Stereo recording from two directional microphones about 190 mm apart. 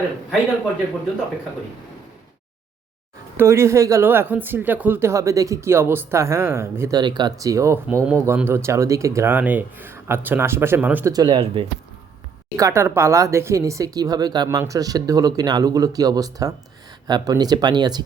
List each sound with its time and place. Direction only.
3.3 s speech: 15° right (ahead or behind)
11.1 s speech: 25° right (ahead or behind)
12.5 s speech: 15° right (ahead or behind)